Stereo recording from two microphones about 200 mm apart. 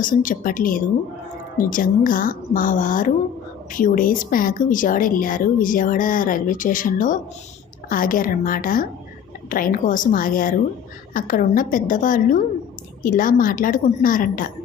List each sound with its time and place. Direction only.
0.0 s a woman's voice: 40° left (ahead or behind)